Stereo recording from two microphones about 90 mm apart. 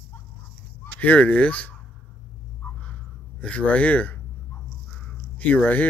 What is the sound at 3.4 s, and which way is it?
Speech, 15° left (ahead or behind).